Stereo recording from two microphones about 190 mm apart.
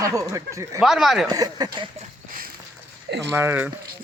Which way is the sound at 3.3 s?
10° right (ahead or behind).